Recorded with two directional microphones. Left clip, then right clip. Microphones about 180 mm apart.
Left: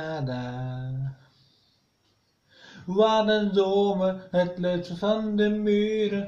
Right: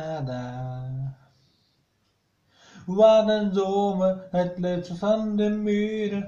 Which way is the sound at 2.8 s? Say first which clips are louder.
Right 4 dB; 10° left (ahead or behind).